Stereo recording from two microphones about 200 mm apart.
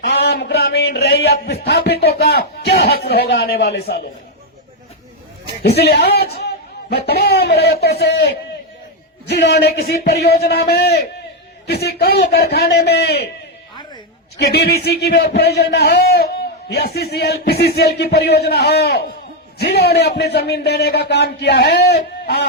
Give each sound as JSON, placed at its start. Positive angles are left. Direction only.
{"t": 0.1, "sound": "a man's voice", "side_deg": 60}
{"t": 5.6, "sound": "a man's voice", "side_deg": 55}
{"t": 14.3, "sound": "a man's voice", "side_deg": 55}